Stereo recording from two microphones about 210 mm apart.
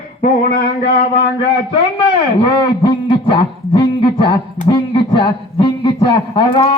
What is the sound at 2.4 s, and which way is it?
A man's voice, 25° left (ahead or behind).